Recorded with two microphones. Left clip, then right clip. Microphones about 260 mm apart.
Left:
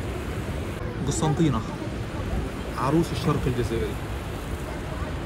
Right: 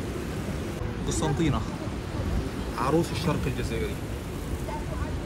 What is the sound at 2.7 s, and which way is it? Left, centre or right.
Speech, centre.